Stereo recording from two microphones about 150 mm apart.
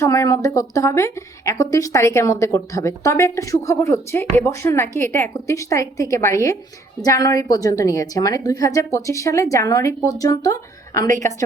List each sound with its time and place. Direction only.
0.0 s speech: 20° left (ahead or behind)